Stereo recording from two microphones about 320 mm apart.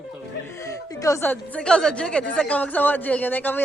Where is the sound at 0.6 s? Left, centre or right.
Centre.